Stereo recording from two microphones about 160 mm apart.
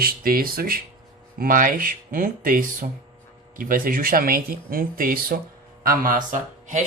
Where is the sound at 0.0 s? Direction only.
65° right (ahead or behind).